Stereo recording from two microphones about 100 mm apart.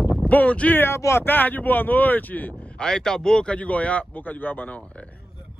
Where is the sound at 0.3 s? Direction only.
15° left (ahead or behind).